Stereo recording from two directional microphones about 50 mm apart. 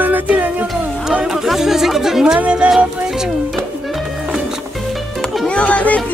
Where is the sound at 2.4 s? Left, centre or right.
Right.